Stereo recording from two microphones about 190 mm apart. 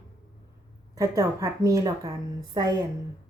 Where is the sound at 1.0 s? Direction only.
15° right (ahead or behind).